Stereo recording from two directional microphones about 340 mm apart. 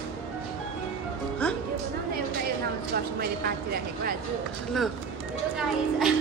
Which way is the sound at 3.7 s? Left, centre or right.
Right.